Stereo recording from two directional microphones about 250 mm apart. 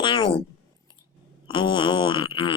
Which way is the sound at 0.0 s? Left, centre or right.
Centre.